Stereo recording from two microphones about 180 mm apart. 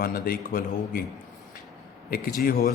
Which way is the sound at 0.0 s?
55° left (ahead or behind).